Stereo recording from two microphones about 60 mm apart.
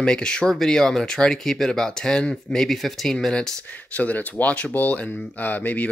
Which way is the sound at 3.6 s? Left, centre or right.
Left.